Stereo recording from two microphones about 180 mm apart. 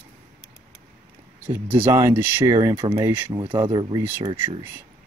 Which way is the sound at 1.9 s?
15° right (ahead or behind).